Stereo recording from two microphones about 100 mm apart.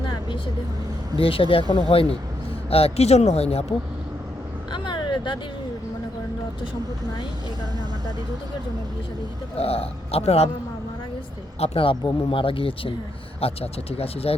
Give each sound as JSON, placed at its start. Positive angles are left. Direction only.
{"t": 0.0, "sound": "vehicle", "side_deg": 50}
{"t": 1.2, "sound": "speech", "side_deg": 65}
{"t": 2.6, "sound": "speech", "side_deg": 80}
{"t": 4.7, "sound": "vehicle", "side_deg": 50}
{"t": 9.6, "sound": "speech", "side_deg": 80}
{"t": 11.6, "sound": "speech", "side_deg": 70}
{"t": 13.4, "sound": "speech", "side_deg": 80}